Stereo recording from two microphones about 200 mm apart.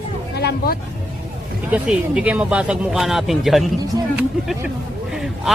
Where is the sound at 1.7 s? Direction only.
5° right (ahead or behind).